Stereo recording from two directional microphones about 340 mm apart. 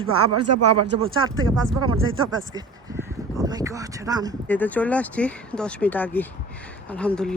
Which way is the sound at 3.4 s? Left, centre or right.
Centre.